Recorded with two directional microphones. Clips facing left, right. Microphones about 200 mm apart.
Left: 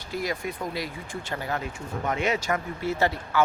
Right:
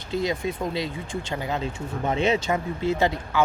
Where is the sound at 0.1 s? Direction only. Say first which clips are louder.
Right 4 dB; 25° right (ahead or behind).